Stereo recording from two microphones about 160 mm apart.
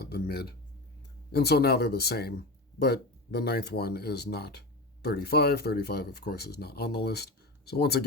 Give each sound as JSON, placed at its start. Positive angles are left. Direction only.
{"t": 0.0, "sound": "speech", "side_deg": 80}